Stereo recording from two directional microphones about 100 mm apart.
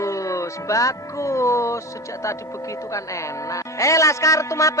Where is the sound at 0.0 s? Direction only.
30° left (ahead or behind).